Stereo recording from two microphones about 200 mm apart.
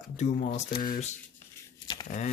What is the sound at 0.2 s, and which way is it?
Speech, 40° left (ahead or behind).